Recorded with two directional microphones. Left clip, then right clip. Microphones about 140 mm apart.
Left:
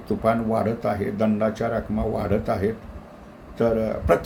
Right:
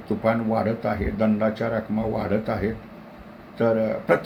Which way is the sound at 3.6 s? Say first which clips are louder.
Even; 20° left (ahead or behind).